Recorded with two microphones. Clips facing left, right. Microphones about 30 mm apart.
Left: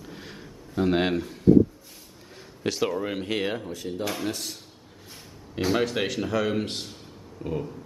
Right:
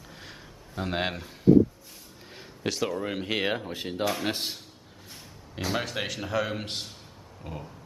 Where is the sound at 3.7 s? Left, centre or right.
Right.